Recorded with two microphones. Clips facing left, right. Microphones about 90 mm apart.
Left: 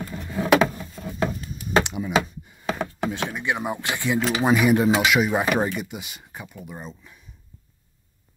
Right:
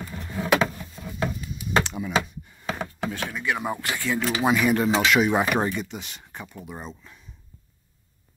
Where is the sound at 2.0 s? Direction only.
5° right (ahead or behind).